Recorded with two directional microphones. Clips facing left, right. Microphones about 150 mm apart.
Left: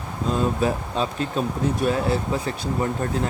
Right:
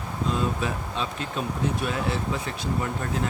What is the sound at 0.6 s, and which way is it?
Speech, 40° left (ahead or behind).